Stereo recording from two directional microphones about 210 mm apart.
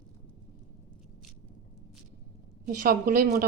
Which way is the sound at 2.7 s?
45° right (ahead or behind).